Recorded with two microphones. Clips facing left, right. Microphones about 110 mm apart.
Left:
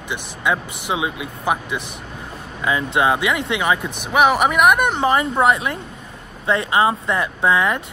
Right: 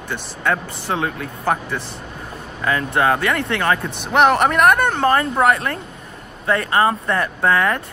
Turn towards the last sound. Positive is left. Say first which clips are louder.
# even
turn(degrees=15)  # may be behind; listen again after turning